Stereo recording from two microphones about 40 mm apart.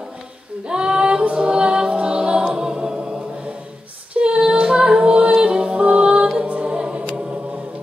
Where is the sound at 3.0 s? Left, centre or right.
Centre.